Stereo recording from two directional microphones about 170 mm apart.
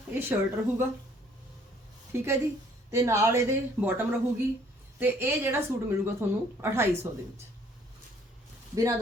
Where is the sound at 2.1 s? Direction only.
15° right (ahead or behind).